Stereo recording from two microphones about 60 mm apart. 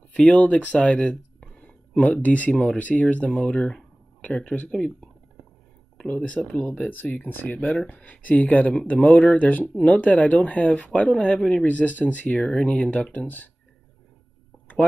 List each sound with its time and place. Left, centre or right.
0.1 s speech: left
5.9 s speech: centre